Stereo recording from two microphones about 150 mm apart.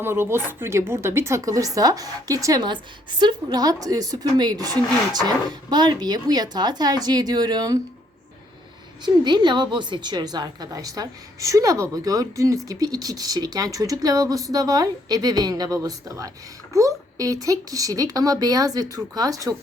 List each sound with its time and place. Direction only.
0.0 s a woman's voice: 15° right (ahead or behind)
9.0 s a woman's voice: 30° right (ahead or behind)